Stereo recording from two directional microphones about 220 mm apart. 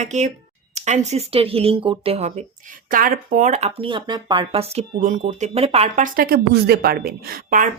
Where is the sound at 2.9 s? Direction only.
40° right (ahead or behind).